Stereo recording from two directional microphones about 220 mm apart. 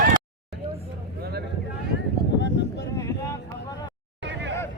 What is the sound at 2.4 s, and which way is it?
Wind noise, 50° left (ahead or behind).